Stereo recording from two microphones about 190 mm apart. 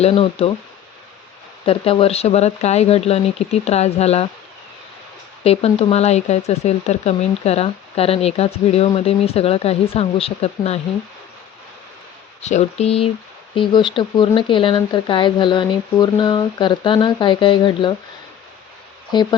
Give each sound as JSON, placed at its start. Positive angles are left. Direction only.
{"t": 0.0, "sound": "speech", "side_deg": 30}
{"t": 1.6, "sound": "speech", "side_deg": 30}
{"t": 5.4, "sound": "speech", "side_deg": 30}
{"t": 12.4, "sound": "speech", "side_deg": 35}
{"t": 19.1, "sound": "speech", "side_deg": 20}